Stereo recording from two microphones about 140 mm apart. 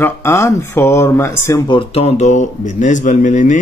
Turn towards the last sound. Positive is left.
turn(degrees=60)  # may be behind; listen again after turning